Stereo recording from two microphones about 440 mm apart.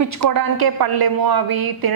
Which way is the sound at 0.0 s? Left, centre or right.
Right.